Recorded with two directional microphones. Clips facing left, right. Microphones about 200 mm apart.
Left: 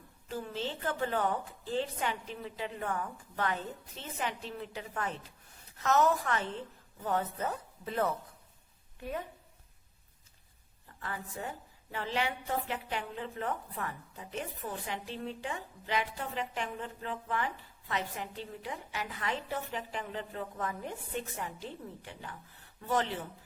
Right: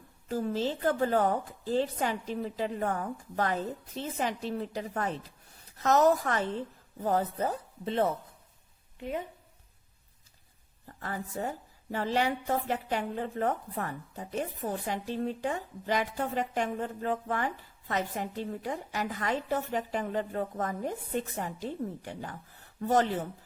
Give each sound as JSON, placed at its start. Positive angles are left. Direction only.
{"t": 0.3, "sound": "a woman's voice", "side_deg": -40}
{"t": 10.8, "sound": "a woman's voice", "side_deg": -40}